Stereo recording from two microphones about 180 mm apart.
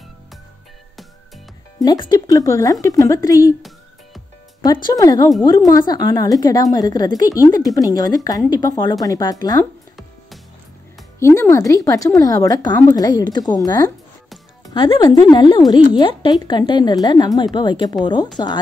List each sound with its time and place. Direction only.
1.8 s speech: 20° left (ahead or behind)
4.8 s speech: 20° left (ahead or behind)
11.1 s speech: 15° left (ahead or behind)